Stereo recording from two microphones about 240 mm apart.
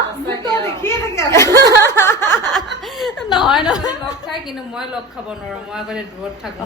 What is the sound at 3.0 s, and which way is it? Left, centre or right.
Speech, centre.